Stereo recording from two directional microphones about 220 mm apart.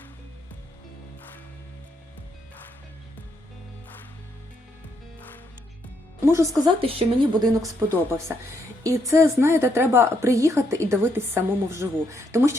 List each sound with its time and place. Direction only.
6.3 s a woman's voice: 15° right (ahead or behind)